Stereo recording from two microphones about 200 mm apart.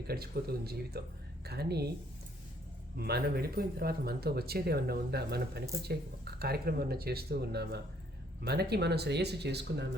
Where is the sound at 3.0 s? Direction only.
50° right (ahead or behind).